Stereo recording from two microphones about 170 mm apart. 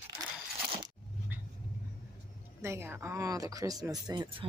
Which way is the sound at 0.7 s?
25° right (ahead or behind).